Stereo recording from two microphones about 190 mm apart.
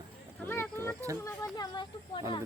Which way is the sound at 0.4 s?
10° left (ahead or behind).